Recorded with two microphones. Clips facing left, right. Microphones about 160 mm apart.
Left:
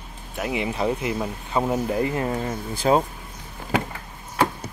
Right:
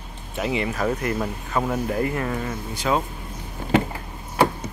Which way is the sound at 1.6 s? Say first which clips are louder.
Left 1 dB; 20° left (ahead or behind).